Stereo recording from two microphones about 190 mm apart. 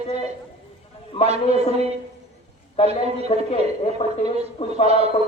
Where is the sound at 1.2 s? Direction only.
35° right (ahead or behind).